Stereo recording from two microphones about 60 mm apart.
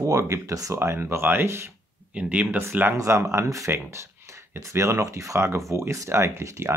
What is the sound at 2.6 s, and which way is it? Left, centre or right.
Speech, right.